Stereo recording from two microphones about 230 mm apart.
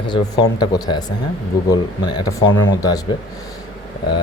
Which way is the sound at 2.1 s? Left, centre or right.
Centre.